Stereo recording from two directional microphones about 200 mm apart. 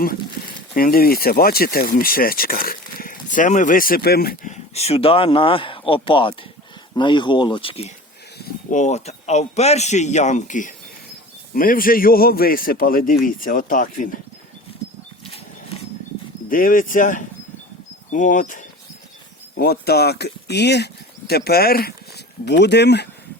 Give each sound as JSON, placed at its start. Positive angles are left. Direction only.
{"t": 0.7, "sound": "speech", "side_deg": 45}
{"t": 4.5, "sound": "a man's voice", "side_deg": 30}
{"t": 14.7, "sound": "wild animals", "side_deg": 30}
{"t": 16.5, "sound": "a man's voice", "side_deg": 45}
{"t": 19.5, "sound": "speech", "side_deg": 50}